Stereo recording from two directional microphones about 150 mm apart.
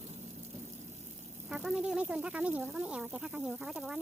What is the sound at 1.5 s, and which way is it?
Speech, 5° right (ahead or behind).